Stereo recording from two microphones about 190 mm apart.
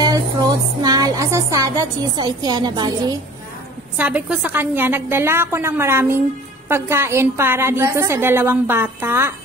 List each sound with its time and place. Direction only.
0.0 s music: 20° right (ahead or behind)
3.9 s a woman's voice: 10° right (ahead or behind)